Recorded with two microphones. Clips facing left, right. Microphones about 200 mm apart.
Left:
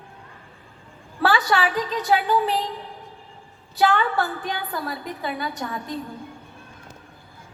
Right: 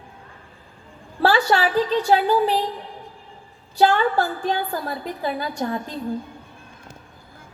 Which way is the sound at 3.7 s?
35° right (ahead or behind).